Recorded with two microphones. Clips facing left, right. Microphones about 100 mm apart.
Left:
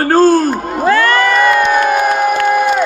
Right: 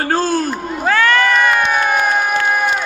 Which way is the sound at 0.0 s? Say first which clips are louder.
Left 8 dB; 40° left (ahead or behind).